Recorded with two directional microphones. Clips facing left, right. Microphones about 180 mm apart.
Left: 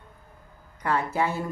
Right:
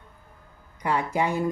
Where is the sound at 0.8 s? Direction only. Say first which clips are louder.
Right 1 dB; 10° right (ahead or behind).